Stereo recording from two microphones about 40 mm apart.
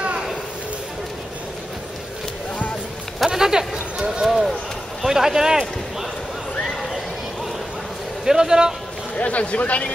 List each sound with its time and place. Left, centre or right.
3.3 s chatter: centre
3.7 s a sound: right
4.2 s a sound: centre
5.0 s speech: centre
6.6 s horse: centre
8.3 s a man's voice: centre
9.1 s speech: left